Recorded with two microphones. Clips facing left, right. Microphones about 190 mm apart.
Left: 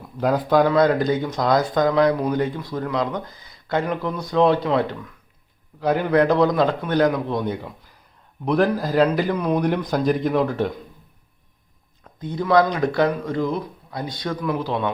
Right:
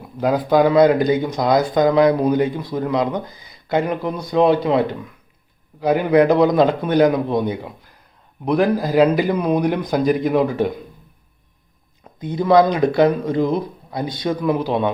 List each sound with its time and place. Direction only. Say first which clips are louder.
0.2 s speech: right 2 dB; 5° right (ahead or behind)
12.0 s speech: right 5 dB; 15° right (ahead or behind)